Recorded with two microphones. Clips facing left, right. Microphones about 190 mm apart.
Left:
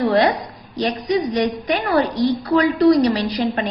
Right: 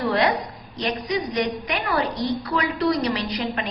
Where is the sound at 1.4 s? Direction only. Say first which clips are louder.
Left 5 dB; 35° left (ahead or behind).